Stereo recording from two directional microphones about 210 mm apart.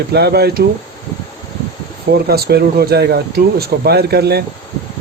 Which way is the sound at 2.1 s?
50° right (ahead or behind).